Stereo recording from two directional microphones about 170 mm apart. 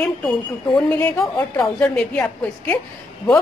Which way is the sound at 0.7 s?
10° left (ahead or behind).